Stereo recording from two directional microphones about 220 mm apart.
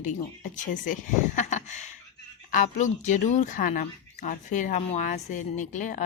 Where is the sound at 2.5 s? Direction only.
35° left (ahead or behind).